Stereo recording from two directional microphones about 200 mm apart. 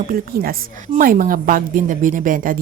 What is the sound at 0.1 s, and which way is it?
Speech, 50° right (ahead or behind).